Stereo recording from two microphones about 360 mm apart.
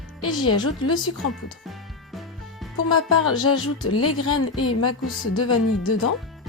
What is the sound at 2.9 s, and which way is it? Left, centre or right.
A woman's voice, left.